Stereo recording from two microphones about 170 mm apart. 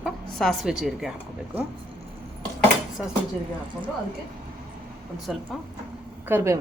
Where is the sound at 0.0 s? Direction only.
Centre (ahead or behind).